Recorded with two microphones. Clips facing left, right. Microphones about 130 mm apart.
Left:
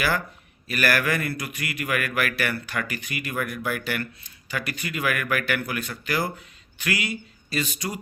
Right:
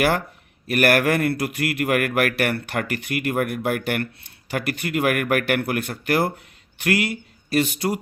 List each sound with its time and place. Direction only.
0.7 s a man's voice: 60° right (ahead or behind)